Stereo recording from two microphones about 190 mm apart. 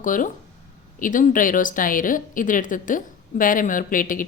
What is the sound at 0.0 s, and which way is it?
A woman's voice, 45° left (ahead or behind).